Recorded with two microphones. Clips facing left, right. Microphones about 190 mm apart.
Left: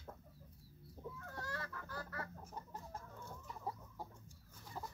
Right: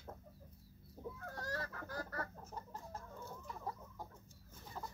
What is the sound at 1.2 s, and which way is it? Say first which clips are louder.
Goose: right 4 dB; 40° right (ahead or behind).